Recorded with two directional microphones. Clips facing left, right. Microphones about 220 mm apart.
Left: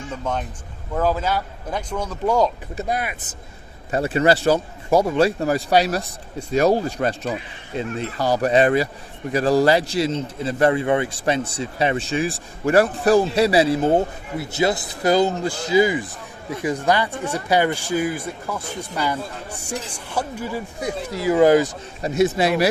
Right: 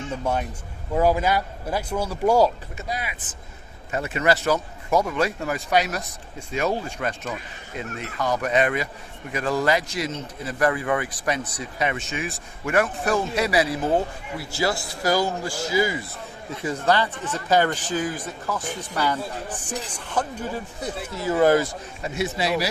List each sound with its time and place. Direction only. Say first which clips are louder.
0.9 s speech: right 1 dB; 10° right (ahead or behind)
2.9 s speech: left 5 dB; 55° left (ahead or behind)
3.9 s a man's voice: left 5 dB; 30° left (ahead or behind); by 21.7 s 15° left (ahead or behind)
22.0 s speech: left 7 dB; 45° left (ahead or behind)